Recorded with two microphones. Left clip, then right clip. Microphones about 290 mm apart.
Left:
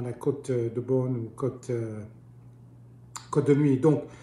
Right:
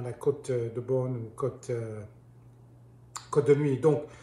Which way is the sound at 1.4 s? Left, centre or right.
Centre.